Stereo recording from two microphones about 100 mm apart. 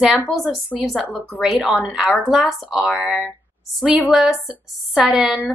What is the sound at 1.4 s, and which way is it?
Speech, 10° right (ahead or behind).